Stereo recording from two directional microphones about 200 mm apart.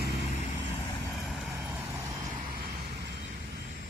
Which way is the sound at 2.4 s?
45° right (ahead or behind).